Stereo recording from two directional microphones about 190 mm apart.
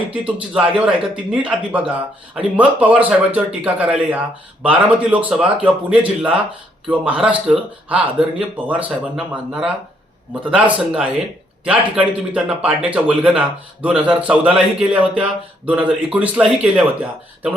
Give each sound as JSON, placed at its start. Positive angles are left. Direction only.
{"t": 0.1, "sound": "a man's voice", "side_deg": -5}